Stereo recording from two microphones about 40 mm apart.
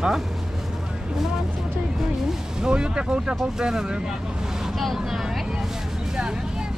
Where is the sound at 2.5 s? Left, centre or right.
Right.